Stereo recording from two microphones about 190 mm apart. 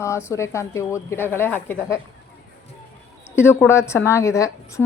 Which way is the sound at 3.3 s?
10° left (ahead or behind).